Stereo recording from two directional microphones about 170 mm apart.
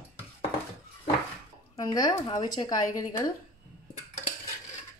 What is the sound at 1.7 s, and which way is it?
Speech, 20° left (ahead or behind).